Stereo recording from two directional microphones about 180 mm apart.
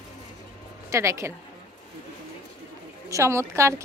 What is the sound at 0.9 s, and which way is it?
Speech, 15° right (ahead or behind).